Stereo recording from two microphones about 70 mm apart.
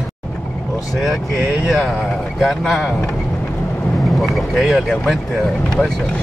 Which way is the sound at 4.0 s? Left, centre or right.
Centre.